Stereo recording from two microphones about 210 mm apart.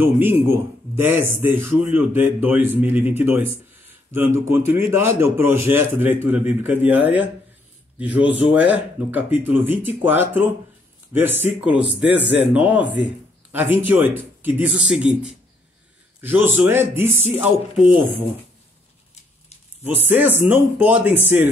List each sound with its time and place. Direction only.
0.0 s a man's voice: 10° right (ahead or behind)
16.2 s a man's voice: 10° right (ahead or behind)
20.1 s a man's voice: 10° right (ahead or behind)